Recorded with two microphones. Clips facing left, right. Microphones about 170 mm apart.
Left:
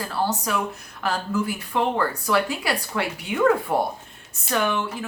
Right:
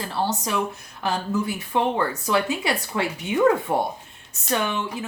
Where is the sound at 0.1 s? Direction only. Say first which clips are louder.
Even; 25° right (ahead or behind).